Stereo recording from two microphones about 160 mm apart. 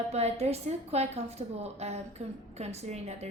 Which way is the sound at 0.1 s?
40° right (ahead or behind).